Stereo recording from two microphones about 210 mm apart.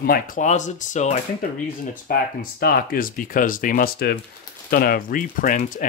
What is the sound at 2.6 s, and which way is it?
Speech, 45° left (ahead or behind).